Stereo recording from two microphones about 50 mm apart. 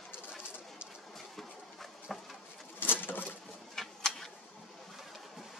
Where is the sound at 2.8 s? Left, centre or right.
Left.